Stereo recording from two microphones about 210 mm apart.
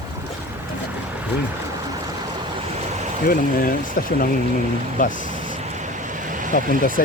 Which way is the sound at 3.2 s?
45° left (ahead or behind).